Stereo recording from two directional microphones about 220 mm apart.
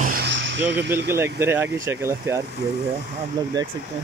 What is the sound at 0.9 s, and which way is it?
Speech, 10° right (ahead or behind).